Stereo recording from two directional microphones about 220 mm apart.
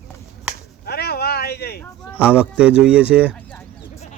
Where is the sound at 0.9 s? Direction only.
45° left (ahead or behind).